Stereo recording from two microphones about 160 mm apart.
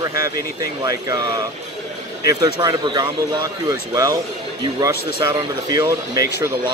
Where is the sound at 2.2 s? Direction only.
20° right (ahead or behind).